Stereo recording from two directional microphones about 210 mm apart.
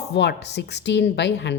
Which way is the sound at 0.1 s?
55° left (ahead or behind).